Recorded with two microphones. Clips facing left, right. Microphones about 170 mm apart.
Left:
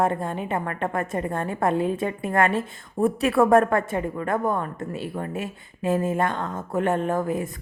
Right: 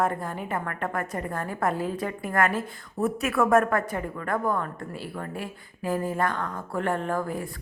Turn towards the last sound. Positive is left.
turn(degrees=20)  # may be behind; listen again after turning